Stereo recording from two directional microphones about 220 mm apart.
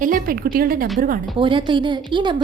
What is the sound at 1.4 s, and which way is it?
Speech, 20° right (ahead or behind).